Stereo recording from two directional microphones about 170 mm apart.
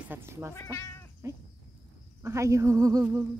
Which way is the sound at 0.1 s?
15° right (ahead or behind).